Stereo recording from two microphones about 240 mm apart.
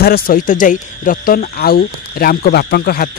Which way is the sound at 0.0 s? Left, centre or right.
Left.